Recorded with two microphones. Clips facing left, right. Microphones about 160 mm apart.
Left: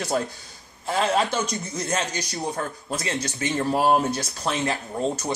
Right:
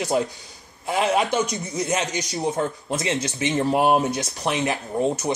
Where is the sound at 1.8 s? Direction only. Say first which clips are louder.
Right 3 dB; 20° right (ahead or behind).